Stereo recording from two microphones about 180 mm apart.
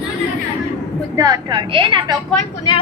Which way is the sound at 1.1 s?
20° right (ahead or behind).